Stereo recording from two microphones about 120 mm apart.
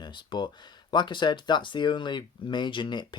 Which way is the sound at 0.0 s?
40° left (ahead or behind).